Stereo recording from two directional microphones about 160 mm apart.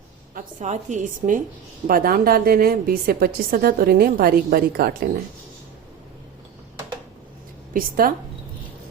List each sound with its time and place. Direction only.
0.3 s a woman's voice: 50° right (ahead or behind)
1.9 s a woman's voice: 65° right (ahead or behind)
7.7 s a woman's voice: 60° right (ahead or behind)